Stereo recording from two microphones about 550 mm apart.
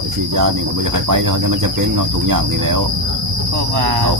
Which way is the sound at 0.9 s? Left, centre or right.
Right.